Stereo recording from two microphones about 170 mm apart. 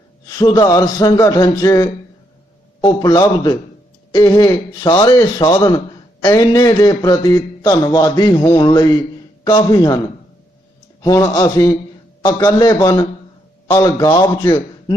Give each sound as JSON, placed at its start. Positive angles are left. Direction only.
{"t": 0.3, "sound": "a man's voice", "side_deg": 20}
{"t": 11.0, "sound": "a man's voice", "side_deg": 20}